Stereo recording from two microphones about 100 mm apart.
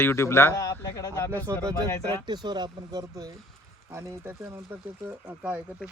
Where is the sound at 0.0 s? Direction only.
25° left (ahead or behind).